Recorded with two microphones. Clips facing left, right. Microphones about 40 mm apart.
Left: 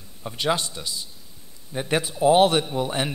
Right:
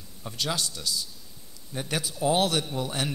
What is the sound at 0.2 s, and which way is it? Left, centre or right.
A man's voice, left.